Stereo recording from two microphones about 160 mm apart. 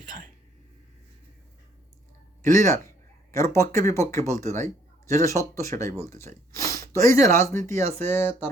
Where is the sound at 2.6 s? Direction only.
15° left (ahead or behind).